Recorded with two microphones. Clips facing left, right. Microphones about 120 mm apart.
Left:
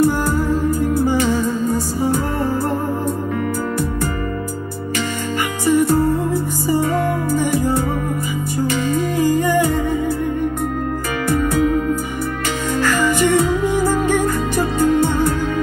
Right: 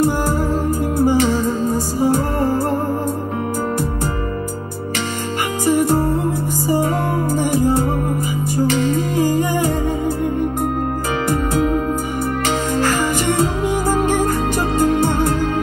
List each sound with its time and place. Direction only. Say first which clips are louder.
0.0 s music: left 1 dB; 35° right (ahead or behind)
5.7 s music: left 1 dB; 35° right (ahead or behind)
7.3 s music: right 2 dB; 30° right (ahead or behind)
12.7 s music: left 4 dB; 35° right (ahead or behind)